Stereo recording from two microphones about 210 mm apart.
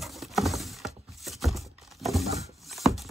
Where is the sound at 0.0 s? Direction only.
Centre (ahead or behind).